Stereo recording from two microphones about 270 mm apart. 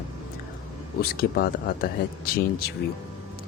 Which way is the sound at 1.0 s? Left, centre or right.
Left.